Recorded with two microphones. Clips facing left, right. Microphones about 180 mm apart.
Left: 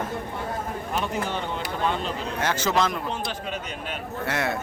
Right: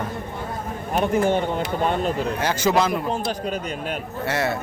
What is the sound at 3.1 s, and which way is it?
Speech, 40° right (ahead or behind).